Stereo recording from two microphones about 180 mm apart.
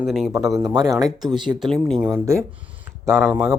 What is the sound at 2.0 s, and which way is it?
Speech, 15° right (ahead or behind).